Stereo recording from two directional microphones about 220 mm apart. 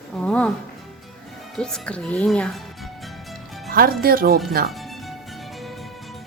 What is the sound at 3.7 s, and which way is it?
Speech, 40° right (ahead or behind).